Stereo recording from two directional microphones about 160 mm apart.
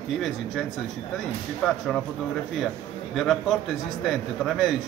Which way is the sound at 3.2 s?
Centre (ahead or behind).